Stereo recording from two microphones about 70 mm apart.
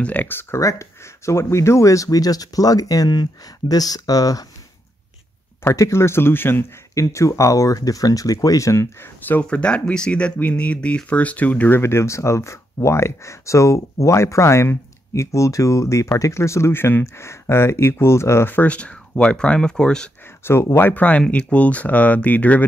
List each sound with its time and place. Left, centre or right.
0.0 s speech: left
0.6 s speech: left
5.8 s speech: left
7.0 s speech: left
9.2 s speech: left
11.8 s speech: left
18.5 s speech: left
20.7 s speech: left